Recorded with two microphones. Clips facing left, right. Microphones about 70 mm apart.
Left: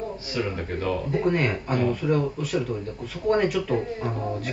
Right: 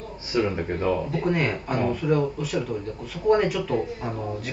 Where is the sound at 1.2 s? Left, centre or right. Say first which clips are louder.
Left 1 dB; centre.